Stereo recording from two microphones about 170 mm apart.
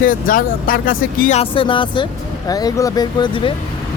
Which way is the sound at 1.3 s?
30° left (ahead or behind).